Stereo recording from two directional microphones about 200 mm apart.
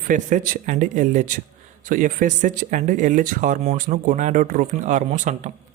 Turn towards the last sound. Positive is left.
turn(degrees=-35)  # may be behind; listen again after turning